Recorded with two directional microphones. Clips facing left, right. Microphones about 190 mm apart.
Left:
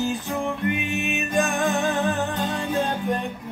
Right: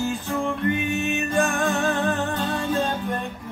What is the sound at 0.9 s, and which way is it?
Music, 15° left (ahead or behind).